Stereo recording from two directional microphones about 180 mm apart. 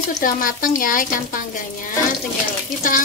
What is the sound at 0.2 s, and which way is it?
Speech, 50° left (ahead or behind).